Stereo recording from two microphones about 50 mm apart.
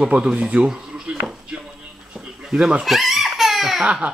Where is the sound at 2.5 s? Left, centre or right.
Centre.